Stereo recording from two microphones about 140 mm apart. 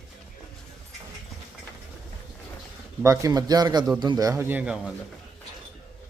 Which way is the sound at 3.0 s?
25° right (ahead or behind).